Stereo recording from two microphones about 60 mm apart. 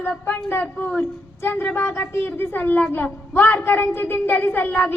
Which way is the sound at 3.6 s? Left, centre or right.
Left.